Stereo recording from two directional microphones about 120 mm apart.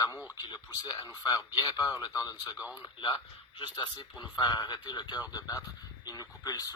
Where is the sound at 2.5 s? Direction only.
15° right (ahead or behind).